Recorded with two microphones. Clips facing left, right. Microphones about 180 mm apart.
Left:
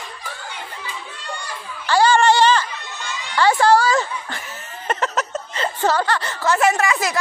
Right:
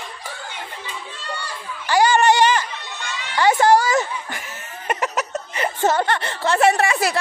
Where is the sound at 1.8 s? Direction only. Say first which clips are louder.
Left 1 dB; 15° right (ahead or behind).